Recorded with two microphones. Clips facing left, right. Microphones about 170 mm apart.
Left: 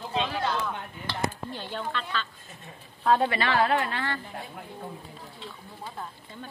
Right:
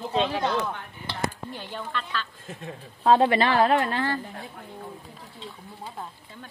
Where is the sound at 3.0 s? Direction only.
25° right (ahead or behind).